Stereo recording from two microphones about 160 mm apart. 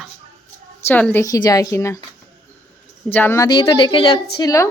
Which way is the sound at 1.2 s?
20° left (ahead or behind).